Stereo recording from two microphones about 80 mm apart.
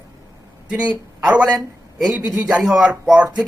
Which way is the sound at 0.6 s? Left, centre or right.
Centre.